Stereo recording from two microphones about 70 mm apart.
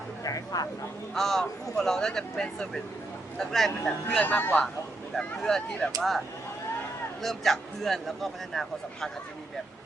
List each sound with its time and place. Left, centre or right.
0.3 s speech: left
1.1 s speech: centre
4.2 s speech: left
5.1 s speech: centre